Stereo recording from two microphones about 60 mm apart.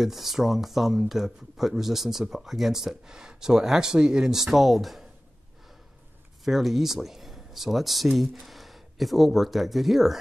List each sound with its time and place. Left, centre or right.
0.0 s speech: centre
6.4 s speech: centre